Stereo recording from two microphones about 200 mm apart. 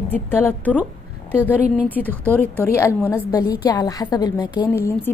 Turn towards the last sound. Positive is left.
turn(degrees=15)  # may be behind; listen again after turning